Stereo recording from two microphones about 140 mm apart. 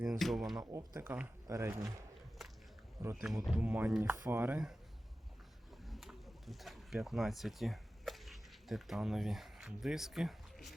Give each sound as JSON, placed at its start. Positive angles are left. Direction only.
{"t": 0.0, "sound": "speech", "side_deg": 0}
{"t": 0.6, "sound": "speech", "side_deg": -25}
{"t": 1.0, "sound": "speech", "side_deg": -10}
{"t": 3.0, "sound": "speech", "side_deg": -20}
{"t": 3.2, "sound": "speech", "side_deg": 0}
{"t": 5.9, "sound": "a sound", "side_deg": 0}